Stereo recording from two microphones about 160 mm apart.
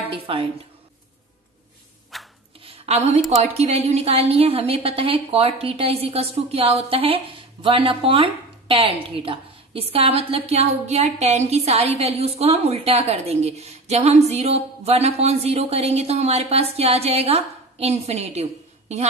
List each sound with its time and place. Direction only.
0.1 s a woman's voice: 35° right (ahead or behind)
2.1 s hands: centre (ahead or behind)
2.6 s a sound: 35° right (ahead or behind)
3.3 s a woman's voice: 45° right (ahead or behind)